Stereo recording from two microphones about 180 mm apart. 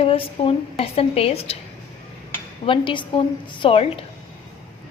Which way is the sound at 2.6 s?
25° left (ahead or behind).